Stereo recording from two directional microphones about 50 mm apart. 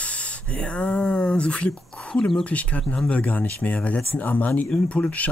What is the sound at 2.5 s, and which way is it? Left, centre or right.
Speech, left.